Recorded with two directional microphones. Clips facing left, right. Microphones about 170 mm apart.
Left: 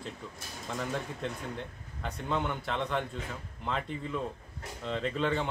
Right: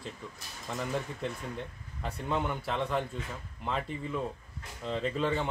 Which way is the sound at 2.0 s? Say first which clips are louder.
Even; 5° right (ahead or behind).